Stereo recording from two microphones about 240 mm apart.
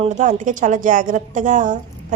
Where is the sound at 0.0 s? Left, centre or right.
Right.